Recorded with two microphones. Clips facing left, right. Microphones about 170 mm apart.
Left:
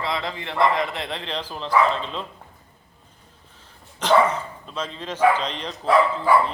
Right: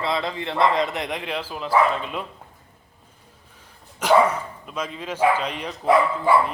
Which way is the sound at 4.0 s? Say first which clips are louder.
Right 1 dB; 10° right (ahead or behind).